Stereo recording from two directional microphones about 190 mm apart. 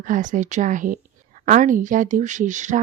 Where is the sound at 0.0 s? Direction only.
45° right (ahead or behind).